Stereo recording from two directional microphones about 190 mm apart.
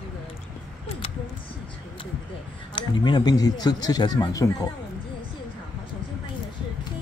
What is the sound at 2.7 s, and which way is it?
Speech, 25° left (ahead or behind).